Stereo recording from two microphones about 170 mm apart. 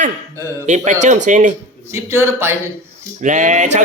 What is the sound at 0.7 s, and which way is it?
Speech, 45° right (ahead or behind).